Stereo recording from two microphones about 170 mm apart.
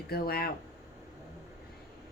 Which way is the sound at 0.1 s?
65° left (ahead or behind).